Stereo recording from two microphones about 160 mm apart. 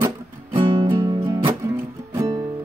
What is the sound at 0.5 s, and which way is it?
Music, 30° right (ahead or behind).